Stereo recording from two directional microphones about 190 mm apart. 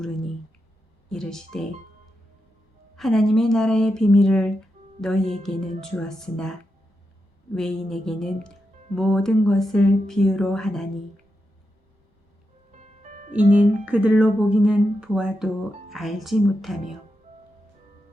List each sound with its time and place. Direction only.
1.1 s speech: 5° left (ahead or behind)
2.9 s speech: centre (ahead or behind)
7.5 s speech: centre (ahead or behind)
12.7 s music: 40° right (ahead or behind)
13.5 s speech: 10° right (ahead or behind)